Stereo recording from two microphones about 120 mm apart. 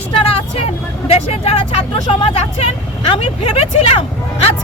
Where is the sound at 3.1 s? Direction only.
55° left (ahead or behind).